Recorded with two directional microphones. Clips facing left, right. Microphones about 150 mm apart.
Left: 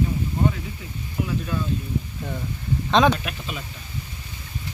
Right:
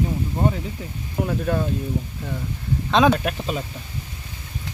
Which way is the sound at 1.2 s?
50° right (ahead or behind).